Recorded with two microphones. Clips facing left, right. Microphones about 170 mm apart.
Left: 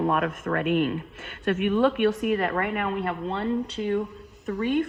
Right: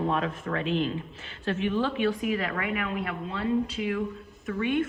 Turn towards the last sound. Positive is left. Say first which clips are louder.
# left 2 dB
turn(degrees=40)  # may be behind; listen again after turning